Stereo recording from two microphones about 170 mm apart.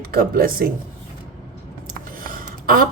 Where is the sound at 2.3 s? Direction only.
55° right (ahead or behind).